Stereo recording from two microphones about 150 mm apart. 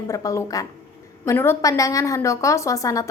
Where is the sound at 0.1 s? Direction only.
20° left (ahead or behind).